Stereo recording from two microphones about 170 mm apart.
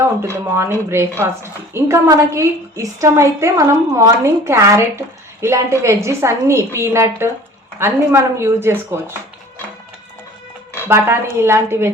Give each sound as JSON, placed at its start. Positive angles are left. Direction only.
{"t": 0.5, "sound": "a woman's voice", "side_deg": -15}
{"t": 10.8, "sound": "a woman's voice", "side_deg": -15}